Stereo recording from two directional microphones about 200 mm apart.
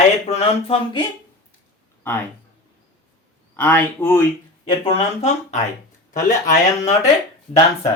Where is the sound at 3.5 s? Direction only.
10° left (ahead or behind).